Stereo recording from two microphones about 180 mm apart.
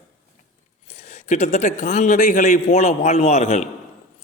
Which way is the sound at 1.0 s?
40° left (ahead or behind).